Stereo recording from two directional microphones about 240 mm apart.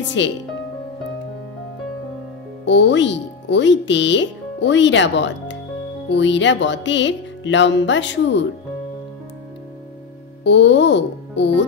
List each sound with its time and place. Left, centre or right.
0.2 s music: left
2.6 s speech: left
6.0 s music: left
10.4 s music: left